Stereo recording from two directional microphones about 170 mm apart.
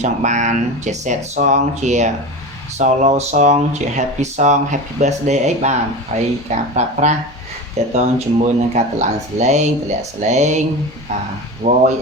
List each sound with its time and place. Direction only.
0.0 s speech: 45° right (ahead or behind)
11.6 s speech: 45° right (ahead or behind)